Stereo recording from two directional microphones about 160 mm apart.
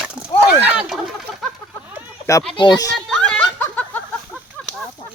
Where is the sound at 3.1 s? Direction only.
5° left (ahead or behind).